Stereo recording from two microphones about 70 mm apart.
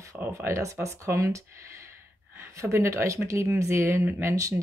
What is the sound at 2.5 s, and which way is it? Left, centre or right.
Speech, right.